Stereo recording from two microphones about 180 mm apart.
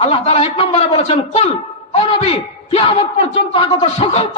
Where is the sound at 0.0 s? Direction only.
35° left (ahead or behind).